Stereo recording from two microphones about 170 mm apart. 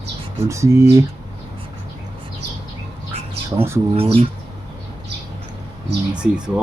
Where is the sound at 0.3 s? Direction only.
15° right (ahead or behind).